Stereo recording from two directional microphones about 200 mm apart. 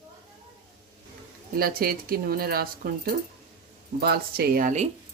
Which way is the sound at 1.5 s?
50° right (ahead or behind).